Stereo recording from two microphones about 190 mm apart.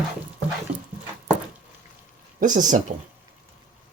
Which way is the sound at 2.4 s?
40° right (ahead or behind).